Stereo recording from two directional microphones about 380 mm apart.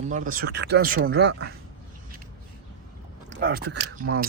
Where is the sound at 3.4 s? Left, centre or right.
Right.